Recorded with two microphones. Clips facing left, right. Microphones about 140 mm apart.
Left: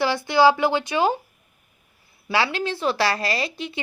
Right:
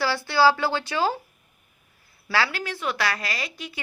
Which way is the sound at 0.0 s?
20° left (ahead or behind).